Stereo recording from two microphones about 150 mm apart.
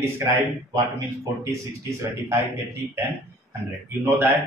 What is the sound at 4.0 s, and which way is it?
Speech, 15° right (ahead or behind).